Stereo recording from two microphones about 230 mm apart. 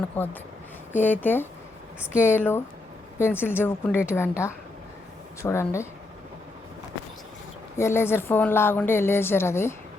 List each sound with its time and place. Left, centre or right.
0.1 s speech: centre
7.8 s speech: centre